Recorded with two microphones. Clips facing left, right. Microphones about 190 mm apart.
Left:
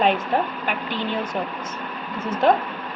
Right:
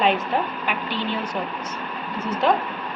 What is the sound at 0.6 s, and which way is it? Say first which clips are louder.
Speech: even; 45° left (ahead or behind).